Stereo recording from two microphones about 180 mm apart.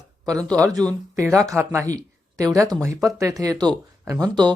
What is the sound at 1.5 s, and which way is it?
Speech, 15° right (ahead or behind).